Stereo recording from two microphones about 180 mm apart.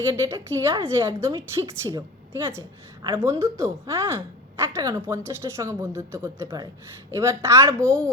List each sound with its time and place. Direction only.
0.0 s a woman's voice: 15° right (ahead or behind)